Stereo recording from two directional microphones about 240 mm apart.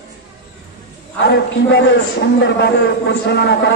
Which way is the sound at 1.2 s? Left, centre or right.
Left.